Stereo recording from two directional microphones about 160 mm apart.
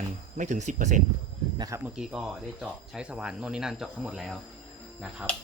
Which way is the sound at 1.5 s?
25° right (ahead or behind).